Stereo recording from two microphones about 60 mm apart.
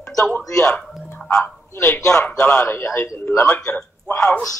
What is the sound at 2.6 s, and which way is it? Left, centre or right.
Speech, left.